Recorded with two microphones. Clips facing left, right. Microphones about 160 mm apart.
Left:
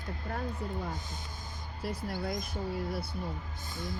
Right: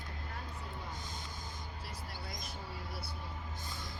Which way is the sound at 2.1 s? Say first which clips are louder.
Left 14 dB; 55° left (ahead or behind).